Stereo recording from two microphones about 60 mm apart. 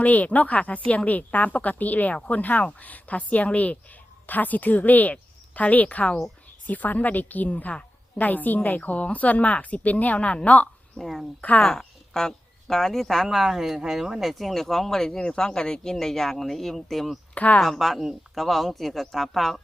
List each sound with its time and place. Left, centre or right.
0.0 s a woman's voice: left
10.9 s speech: centre
17.3 s speech: left
17.6 s speech: centre